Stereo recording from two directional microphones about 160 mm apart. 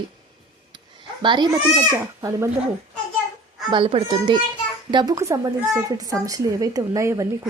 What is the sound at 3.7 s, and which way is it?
Speech, 35° right (ahead or behind).